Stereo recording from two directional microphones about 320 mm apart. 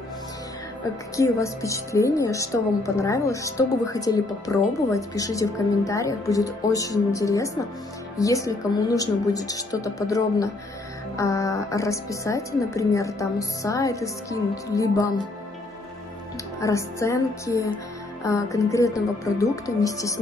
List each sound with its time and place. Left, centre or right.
1.1 s a woman's voice: centre
16.6 s a woman's voice: centre